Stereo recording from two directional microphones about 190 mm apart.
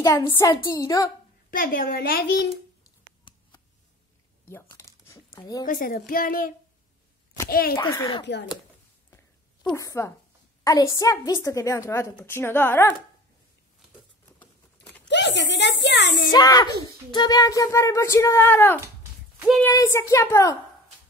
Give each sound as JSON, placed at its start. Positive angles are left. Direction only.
{"t": 0.0, "sound": "speech", "side_deg": 15}
{"t": 1.5, "sound": "a child's voice", "side_deg": 45}
{"t": 3.3, "sound": "a sound", "side_deg": 25}
{"t": 4.5, "sound": "crumpling", "side_deg": 15}
{"t": 5.4, "sound": "speech", "side_deg": 20}
{"t": 5.7, "sound": "a child's voice", "side_deg": 45}
{"t": 7.7, "sound": "speech", "side_deg": 15}
{"t": 8.3, "sound": "a child's voice", "side_deg": 65}
{"t": 9.7, "sound": "speech", "side_deg": 15}
{"t": 15.0, "sound": "a child's voice", "side_deg": 65}
{"t": 16.3, "sound": "speech", "side_deg": 20}